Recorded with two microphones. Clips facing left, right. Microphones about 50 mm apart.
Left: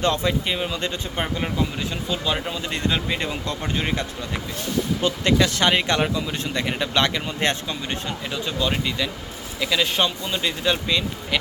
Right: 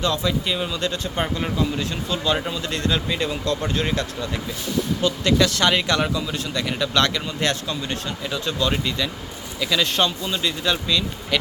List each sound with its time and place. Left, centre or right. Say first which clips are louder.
0.0 s speech: left 1 dB; left
0.4 s speech: right 1 dB; left
1.2 s speech: right 1 dB; centre